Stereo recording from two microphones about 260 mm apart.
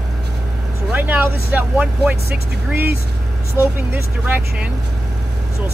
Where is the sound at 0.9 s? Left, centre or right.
Centre.